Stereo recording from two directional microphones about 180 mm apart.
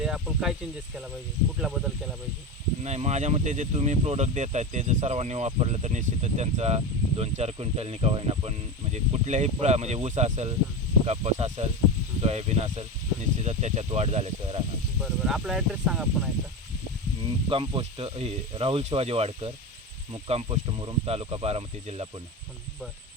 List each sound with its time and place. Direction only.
0.0 s speech: 5° right (ahead or behind)
1.5 s speech: 5° right (ahead or behind)
2.8 s speech: 40° right (ahead or behind)
15.0 s speech: 5° right (ahead or behind)
17.5 s speech: 30° right (ahead or behind)